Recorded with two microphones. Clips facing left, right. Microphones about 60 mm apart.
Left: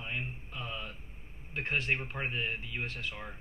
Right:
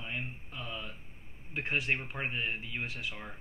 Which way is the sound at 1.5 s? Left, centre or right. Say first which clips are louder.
Even; centre.